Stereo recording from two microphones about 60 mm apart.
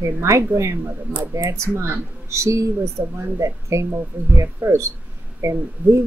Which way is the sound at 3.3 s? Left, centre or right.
Right.